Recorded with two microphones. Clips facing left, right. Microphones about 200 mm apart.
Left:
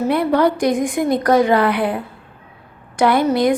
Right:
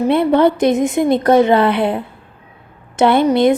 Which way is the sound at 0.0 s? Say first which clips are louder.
Right 3 dB; 25° right (ahead or behind).